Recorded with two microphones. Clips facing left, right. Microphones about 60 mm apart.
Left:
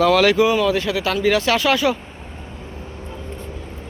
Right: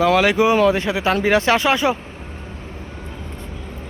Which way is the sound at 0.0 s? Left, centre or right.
Right.